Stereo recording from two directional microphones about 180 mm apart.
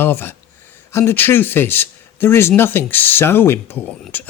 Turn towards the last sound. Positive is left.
turn(degrees=10)  # may be behind; listen again after turning